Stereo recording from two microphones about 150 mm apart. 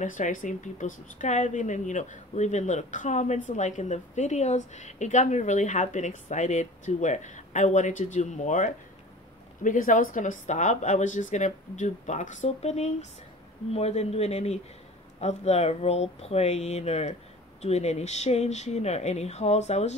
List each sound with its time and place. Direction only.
0.0 s speech: 60° left (ahead or behind)